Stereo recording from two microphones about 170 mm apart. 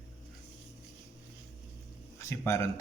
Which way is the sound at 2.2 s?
15° left (ahead or behind).